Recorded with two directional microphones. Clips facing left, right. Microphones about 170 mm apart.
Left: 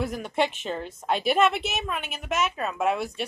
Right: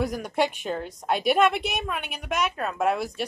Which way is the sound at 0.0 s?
Centre (ahead or behind).